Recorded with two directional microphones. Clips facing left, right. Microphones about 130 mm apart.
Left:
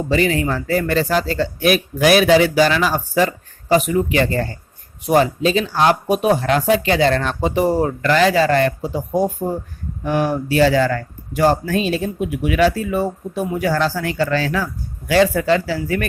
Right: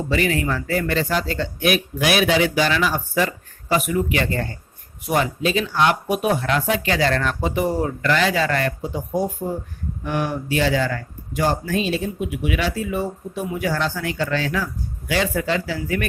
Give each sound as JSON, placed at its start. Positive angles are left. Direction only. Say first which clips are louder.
{"t": 0.1, "sound": "speech", "louder": "left 4 dB", "side_deg": 30}